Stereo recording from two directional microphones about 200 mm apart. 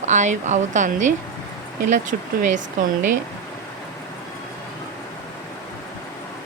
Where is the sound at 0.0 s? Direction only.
35° right (ahead or behind).